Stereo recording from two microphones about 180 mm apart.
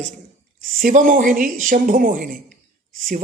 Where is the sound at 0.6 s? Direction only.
50° right (ahead or behind).